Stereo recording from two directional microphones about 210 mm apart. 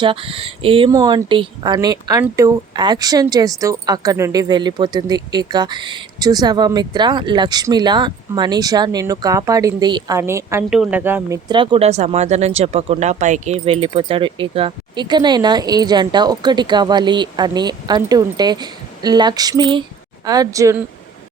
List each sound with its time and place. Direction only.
0.0 s a woman's voice: 25° right (ahead or behind)